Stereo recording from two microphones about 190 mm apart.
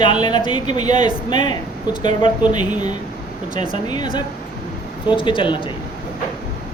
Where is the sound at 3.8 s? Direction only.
20° left (ahead or behind).